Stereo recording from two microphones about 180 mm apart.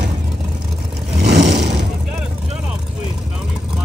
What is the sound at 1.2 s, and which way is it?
Vehicle, 65° right (ahead or behind).